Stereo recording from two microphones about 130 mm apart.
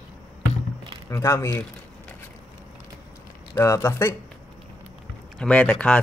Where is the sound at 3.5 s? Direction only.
20° left (ahead or behind).